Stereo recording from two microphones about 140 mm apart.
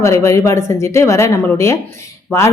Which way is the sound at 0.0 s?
20° left (ahead or behind).